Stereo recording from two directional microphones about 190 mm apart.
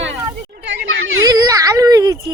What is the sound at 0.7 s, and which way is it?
Children playing, 75° right (ahead or behind).